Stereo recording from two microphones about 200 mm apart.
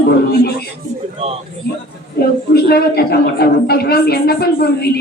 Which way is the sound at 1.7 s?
55° left (ahead or behind).